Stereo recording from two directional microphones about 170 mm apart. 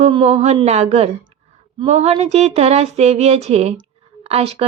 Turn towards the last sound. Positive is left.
turn(degrees=-35)  # may be behind; listen again after turning